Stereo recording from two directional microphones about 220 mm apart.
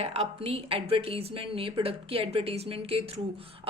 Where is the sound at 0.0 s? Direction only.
25° right (ahead or behind).